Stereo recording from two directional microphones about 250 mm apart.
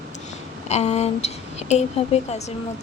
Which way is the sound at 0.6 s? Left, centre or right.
Left.